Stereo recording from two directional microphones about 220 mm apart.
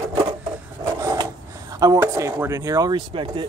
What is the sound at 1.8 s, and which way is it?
Speech, 15° right (ahead or behind).